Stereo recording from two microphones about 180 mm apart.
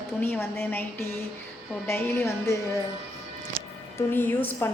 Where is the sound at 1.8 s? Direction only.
15° left (ahead or behind).